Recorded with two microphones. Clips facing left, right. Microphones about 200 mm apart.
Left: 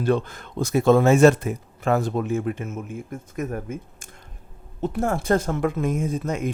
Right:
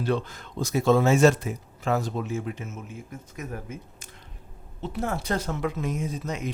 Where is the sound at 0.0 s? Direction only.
50° left (ahead or behind).